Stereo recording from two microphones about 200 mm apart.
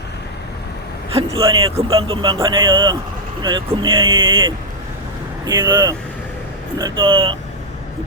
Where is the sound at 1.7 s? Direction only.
25° right (ahead or behind).